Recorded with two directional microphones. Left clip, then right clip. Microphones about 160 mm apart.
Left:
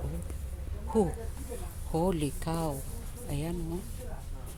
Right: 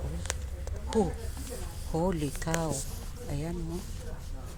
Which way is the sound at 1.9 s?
20° left (ahead or behind).